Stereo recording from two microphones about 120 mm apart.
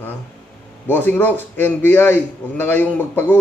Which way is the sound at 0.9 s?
15° left (ahead or behind).